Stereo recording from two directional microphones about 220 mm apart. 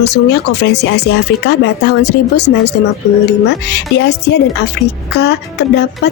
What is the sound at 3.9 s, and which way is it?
Speech, 50° left (ahead or behind).